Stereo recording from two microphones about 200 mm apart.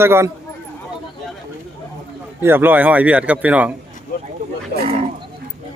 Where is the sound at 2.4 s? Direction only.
10° right (ahead or behind).